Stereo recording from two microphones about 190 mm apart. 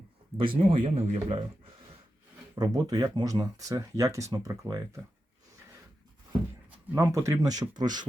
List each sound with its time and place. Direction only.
0.6 s speech: 30° right (ahead or behind)
2.6 s speech: 20° right (ahead or behind)
6.7 s speech: 15° right (ahead or behind)